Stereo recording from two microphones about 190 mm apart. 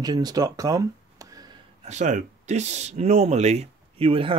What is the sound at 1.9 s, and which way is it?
Speech, 40° right (ahead or behind).